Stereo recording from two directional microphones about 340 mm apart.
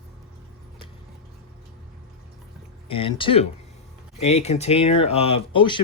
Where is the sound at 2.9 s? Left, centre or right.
Centre.